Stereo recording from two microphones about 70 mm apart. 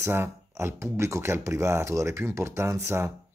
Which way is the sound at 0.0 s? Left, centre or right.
Right.